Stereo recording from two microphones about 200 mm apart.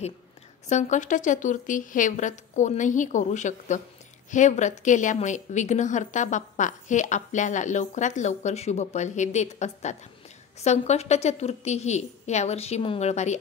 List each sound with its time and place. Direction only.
0.7 s a woman's voice: 35° left (ahead or behind)